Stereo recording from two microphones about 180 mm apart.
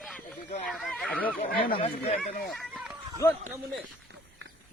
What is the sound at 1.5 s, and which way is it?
Speech, 55° left (ahead or behind).